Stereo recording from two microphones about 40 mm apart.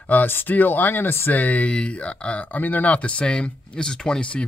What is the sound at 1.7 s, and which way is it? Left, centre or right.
Speech, left.